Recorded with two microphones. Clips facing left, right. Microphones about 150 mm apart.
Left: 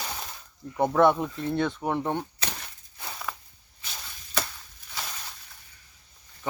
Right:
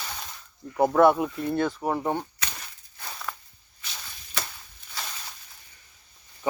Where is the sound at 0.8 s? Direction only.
5° right (ahead or behind).